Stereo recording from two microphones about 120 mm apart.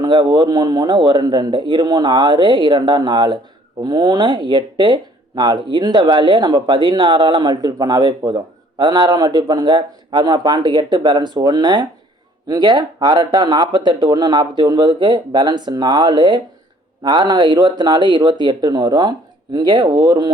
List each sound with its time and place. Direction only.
0.0 s speech: 40° right (ahead or behind)